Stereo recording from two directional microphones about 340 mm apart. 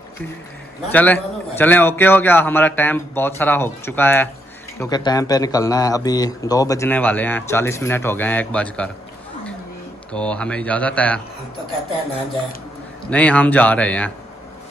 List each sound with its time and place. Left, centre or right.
0.9 s a man's voice: centre
10.1 s a man's voice: centre
13.1 s a man's voice: centre